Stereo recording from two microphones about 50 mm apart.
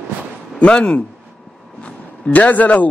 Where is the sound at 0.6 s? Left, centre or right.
Left.